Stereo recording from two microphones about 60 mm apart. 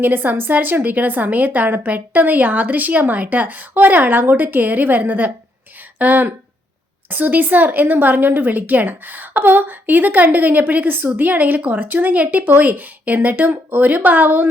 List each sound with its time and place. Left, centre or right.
0.0 s a woman's voice: right